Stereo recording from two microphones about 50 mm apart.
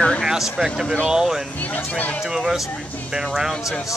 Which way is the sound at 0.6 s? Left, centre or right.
Centre.